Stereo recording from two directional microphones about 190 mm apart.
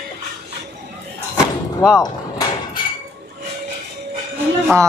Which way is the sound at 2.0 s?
20° left (ahead or behind).